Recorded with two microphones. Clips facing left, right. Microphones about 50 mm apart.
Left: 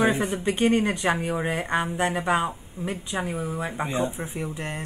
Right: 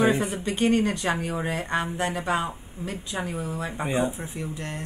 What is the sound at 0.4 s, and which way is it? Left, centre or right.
Speech, left.